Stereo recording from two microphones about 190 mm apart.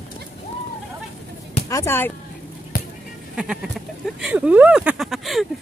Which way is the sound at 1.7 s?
15° left (ahead or behind).